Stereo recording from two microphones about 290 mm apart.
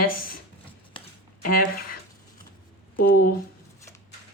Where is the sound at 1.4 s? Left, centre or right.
Left.